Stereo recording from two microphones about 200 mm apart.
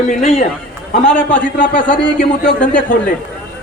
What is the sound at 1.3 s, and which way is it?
Speech, 40° left (ahead or behind).